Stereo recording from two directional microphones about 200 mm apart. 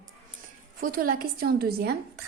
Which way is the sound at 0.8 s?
45° right (ahead or behind).